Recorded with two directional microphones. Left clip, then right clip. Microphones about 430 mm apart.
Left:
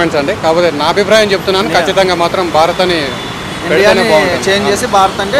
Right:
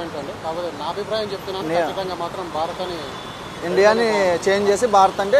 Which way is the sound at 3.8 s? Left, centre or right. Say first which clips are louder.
Left 7 dB; centre.